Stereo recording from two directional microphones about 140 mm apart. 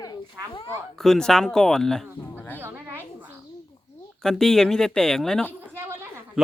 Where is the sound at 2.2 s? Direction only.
15° left (ahead or behind).